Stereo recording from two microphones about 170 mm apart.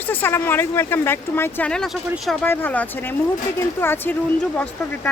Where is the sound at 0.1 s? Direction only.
10° left (ahead or behind).